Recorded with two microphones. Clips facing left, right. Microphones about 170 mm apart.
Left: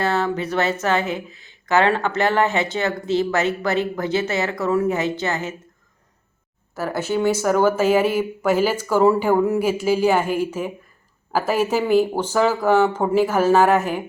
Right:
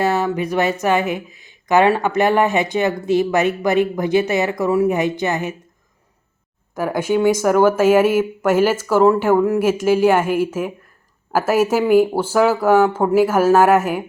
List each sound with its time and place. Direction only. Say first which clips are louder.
0.0 s speech: right 3 dB; 15° right (ahead or behind)
6.7 s speech: right 4 dB; 10° right (ahead or behind)